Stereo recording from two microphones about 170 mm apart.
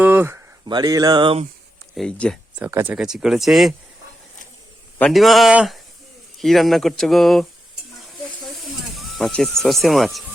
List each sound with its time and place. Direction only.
0.0 s a sound: 10° right (ahead or behind)
0.6 s speech: 25° right (ahead or behind)
2.0 s speech: 5° left (ahead or behind)
2.6 s speech: 15° right (ahead or behind)
4.9 s speech: 5° left (ahead or behind)
8.5 s speech: centre (ahead or behind)